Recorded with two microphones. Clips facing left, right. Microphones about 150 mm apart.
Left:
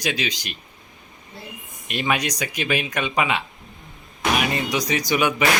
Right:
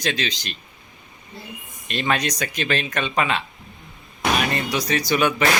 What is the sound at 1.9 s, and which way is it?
Speech, 10° left (ahead or behind).